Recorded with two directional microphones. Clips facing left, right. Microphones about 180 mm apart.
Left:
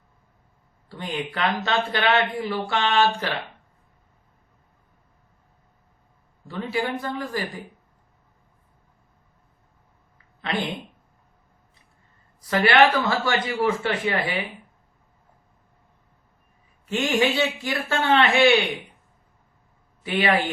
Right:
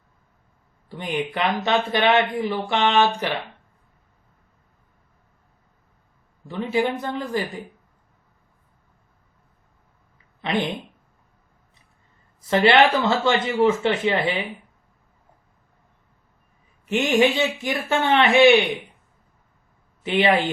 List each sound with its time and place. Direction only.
0.9 s speech: 15° right (ahead or behind)
6.5 s speech: 20° right (ahead or behind)
10.4 s speech: 20° right (ahead or behind)
12.4 s speech: 25° right (ahead or behind)
16.8 s speech: 20° right (ahead or behind)
20.0 s speech: 25° right (ahead or behind)